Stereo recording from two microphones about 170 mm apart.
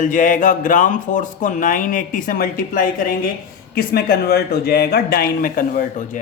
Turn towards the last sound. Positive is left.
turn(degrees=50)  # may be behind; listen again after turning